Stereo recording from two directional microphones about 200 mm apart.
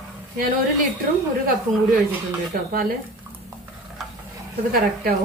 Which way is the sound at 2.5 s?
45° right (ahead or behind).